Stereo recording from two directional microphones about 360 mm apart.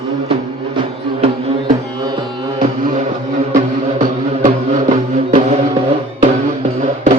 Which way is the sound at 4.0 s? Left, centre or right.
Centre.